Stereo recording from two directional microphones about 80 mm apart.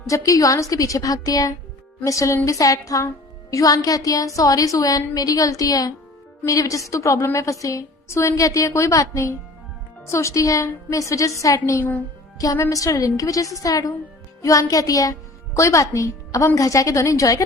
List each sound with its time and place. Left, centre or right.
0.1 s a woman's voice: left